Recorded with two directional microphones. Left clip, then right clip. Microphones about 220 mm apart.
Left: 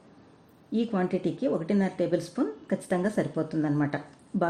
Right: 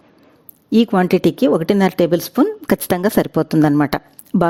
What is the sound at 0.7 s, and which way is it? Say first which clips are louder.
Speech: right 14 dB; 55° right (ahead or behind).